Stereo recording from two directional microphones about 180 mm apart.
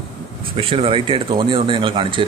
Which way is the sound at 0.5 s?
30° right (ahead or behind).